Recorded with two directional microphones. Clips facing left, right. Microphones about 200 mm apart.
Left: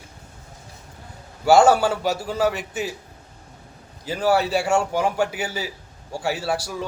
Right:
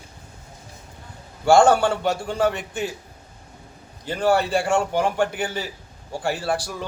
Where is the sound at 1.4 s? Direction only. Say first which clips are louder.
Even; 5° left (ahead or behind).